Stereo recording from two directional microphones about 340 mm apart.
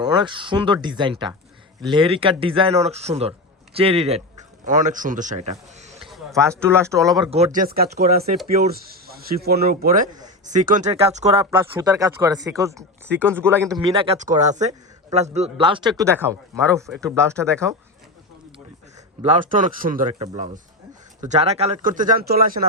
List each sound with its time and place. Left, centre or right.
0.0 s speech: centre
6.1 s speech: centre
7.3 s speech: centre
19.2 s speech: right